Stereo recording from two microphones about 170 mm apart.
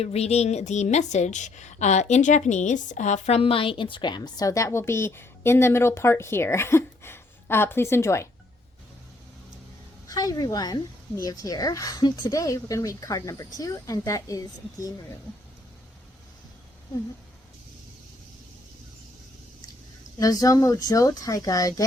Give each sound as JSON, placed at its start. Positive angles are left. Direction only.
{"t": 0.0, "sound": "a woman's voice", "side_deg": 40}
{"t": 10.1, "sound": "a woman's voice", "side_deg": 20}
{"t": 20.1, "sound": "a woman's voice", "side_deg": 20}